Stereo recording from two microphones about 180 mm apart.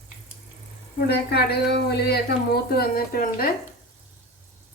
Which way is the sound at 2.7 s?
55° left (ahead or behind).